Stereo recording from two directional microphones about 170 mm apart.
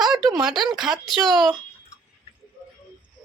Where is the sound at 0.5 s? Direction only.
25° right (ahead or behind).